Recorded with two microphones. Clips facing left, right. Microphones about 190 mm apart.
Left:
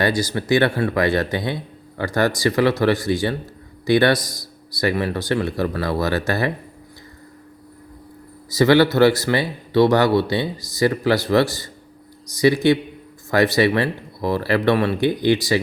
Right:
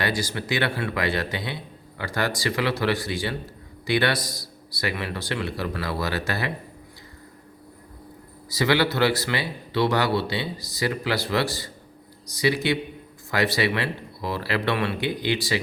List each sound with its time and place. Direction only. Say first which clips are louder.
0.0 s speech: left 6 dB; 40° left (ahead or behind)
8.4 s speech: left 8 dB; 45° left (ahead or behind)